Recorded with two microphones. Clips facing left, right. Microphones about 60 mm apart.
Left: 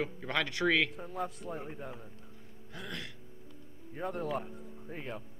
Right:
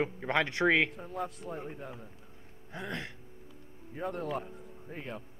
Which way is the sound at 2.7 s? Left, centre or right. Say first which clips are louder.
Right 4 dB; right.